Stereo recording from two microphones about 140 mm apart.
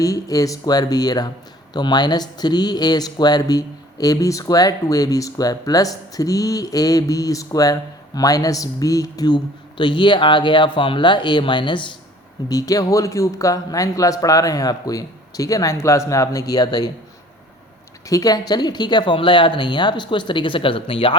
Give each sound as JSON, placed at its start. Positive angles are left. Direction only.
{"t": 0.0, "sound": "speech", "side_deg": 25}
{"t": 18.1, "sound": "speech", "side_deg": 25}